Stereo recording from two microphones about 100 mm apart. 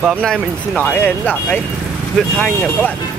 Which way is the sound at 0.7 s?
15° left (ahead or behind).